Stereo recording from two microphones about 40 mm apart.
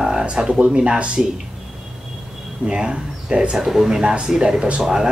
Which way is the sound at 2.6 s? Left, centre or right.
Right.